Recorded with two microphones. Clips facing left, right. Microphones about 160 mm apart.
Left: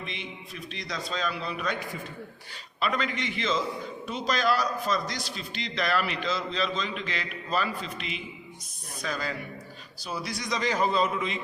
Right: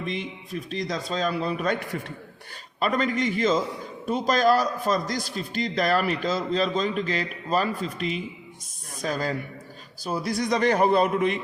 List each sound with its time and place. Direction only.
0.0 s a man's voice: 40° right (ahead or behind)
2.8 s a man's voice: 45° right (ahead or behind); by 11.3 s 60° right (ahead or behind)